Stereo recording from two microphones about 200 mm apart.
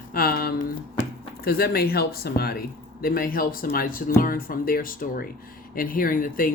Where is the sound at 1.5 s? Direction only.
50° left (ahead or behind).